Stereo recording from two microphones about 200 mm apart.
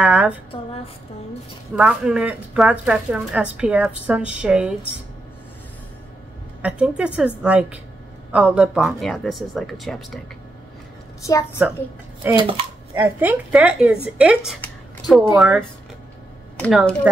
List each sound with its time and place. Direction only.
0.0 s a woman's voice: 5° right (ahead or behind)
1.8 s a woman's voice: 5° right (ahead or behind)
6.6 s a woman's voice: 5° right (ahead or behind)
11.6 s a woman's voice: 5° right (ahead or behind)
12.4 s speech: 25° right (ahead or behind)
12.9 s a woman's voice: 10° right (ahead or behind)
14.6 s a sound: centre (ahead or behind)
15.3 s a woman's voice: 5° right (ahead or behind)